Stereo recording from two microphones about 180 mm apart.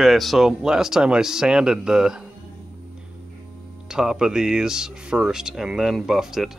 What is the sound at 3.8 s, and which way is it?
Speech, 5° right (ahead or behind).